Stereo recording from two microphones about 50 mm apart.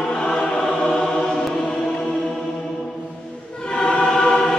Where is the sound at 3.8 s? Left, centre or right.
Centre.